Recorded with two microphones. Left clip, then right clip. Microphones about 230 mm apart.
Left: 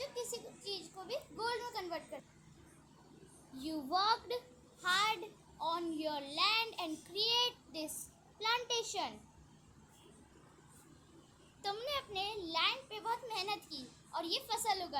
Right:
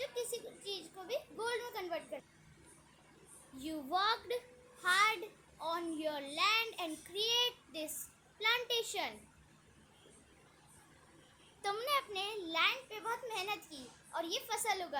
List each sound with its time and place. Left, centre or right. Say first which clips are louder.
0.0 s a sound: right 2 dB; centre
3.6 s a child's voice: even; centre
11.6 s a child's voice: right 4 dB; right